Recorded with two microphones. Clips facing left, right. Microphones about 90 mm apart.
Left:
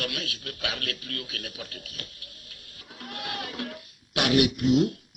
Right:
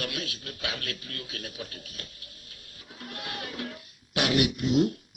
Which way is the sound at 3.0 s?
50° left (ahead or behind).